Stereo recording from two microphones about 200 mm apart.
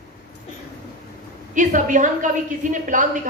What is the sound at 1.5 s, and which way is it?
A man's voice, 40° right (ahead or behind).